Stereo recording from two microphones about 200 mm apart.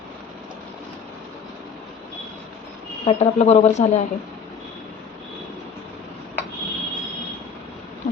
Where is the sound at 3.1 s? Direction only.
30° left (ahead or behind).